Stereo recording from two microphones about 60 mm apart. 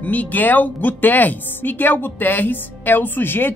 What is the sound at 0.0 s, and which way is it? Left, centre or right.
Speech, left.